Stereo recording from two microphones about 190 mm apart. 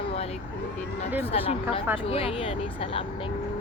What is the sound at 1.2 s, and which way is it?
Speech, 30° left (ahead or behind).